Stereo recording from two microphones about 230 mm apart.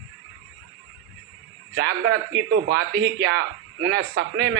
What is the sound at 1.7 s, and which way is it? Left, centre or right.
Speech, right.